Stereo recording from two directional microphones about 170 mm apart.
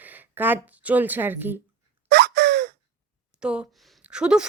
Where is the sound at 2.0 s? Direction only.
75° right (ahead or behind).